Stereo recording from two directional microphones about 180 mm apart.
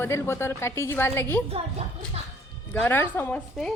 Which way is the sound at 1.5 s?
35° right (ahead or behind).